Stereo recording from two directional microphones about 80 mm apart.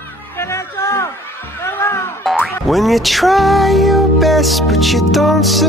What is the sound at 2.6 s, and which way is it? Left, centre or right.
Music, centre.